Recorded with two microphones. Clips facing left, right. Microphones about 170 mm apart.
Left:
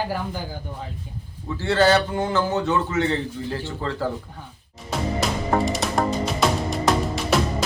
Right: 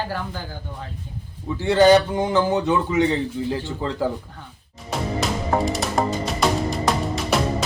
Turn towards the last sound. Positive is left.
turn(degrees=0)  # may be behind; listen again after turning